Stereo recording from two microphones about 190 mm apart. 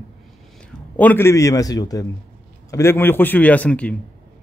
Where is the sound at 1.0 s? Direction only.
10° left (ahead or behind).